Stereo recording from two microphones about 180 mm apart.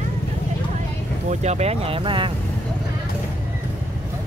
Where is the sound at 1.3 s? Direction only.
40° right (ahead or behind).